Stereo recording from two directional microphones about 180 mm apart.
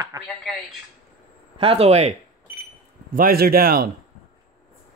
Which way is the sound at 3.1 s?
50° right (ahead or behind).